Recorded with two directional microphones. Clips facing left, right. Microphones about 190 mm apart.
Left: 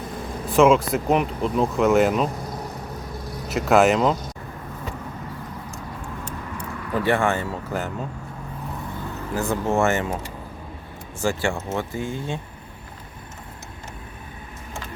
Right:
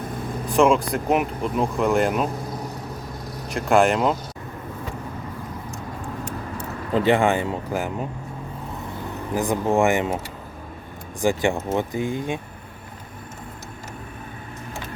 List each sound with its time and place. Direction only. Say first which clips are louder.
0.4 s speech: left 2 dB; centre (ahead or behind)
3.5 s speech: left 1 dB; 5° left (ahead or behind)
6.9 s speech: right 3 dB; 20° right (ahead or behind)
9.3 s speech: right 2 dB; 15° right (ahead or behind)
11.2 s speech: right 3 dB; 15° right (ahead or behind)